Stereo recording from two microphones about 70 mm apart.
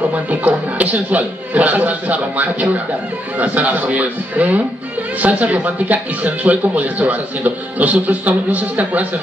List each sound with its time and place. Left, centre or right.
0.1 s speech: right